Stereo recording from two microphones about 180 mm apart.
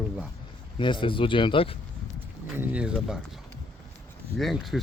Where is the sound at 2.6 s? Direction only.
5° right (ahead or behind).